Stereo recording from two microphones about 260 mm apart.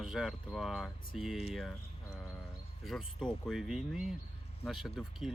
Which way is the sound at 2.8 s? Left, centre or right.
Centre.